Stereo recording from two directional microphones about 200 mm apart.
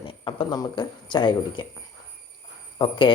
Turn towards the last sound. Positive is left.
turn(degrees=25)  # may be behind; listen again after turning